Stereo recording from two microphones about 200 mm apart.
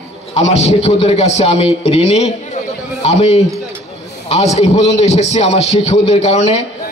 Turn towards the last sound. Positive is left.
turn(degrees=30)  # may be behind; listen again after turning